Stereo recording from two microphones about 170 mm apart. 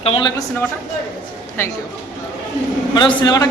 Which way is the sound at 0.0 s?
35° left (ahead or behind).